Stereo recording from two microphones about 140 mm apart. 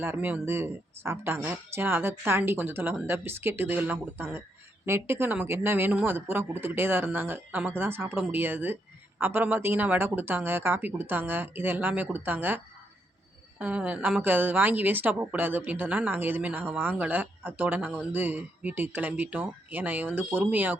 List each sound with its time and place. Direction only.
0.0 s a woman's voice: 15° right (ahead or behind)